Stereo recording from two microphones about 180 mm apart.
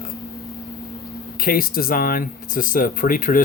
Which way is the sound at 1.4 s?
55° left (ahead or behind).